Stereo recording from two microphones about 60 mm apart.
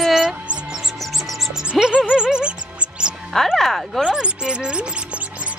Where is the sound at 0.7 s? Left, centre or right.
Centre.